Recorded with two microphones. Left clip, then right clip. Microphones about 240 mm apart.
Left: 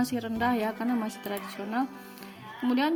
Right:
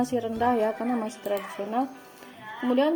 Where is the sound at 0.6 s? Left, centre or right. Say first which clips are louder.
Right 4 dB; left.